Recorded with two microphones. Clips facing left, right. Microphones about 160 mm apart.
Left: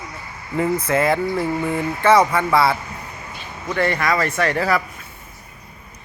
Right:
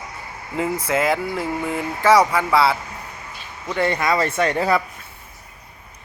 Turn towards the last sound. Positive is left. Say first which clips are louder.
# even
turn(degrees=-20)  # may be behind; listen again after turning